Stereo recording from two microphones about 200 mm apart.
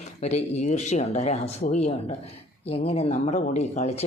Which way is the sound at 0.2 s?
35° left (ahead or behind).